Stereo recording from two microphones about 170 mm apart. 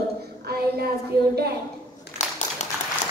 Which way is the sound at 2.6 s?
45° left (ahead or behind).